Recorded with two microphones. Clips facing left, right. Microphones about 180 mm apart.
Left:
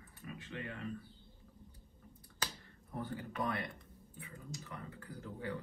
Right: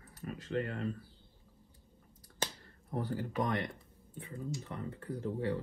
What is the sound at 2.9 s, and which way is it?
Speech, 40° right (ahead or behind).